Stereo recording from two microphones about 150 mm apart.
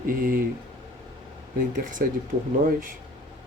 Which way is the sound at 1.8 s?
60° right (ahead or behind).